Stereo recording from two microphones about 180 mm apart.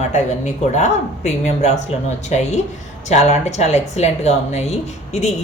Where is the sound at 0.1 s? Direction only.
40° left (ahead or behind).